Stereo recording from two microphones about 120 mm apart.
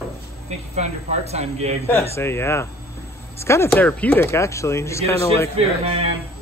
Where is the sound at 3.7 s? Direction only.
15° left (ahead or behind).